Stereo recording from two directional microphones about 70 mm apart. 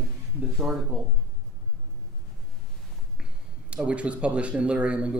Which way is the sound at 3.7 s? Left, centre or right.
Centre.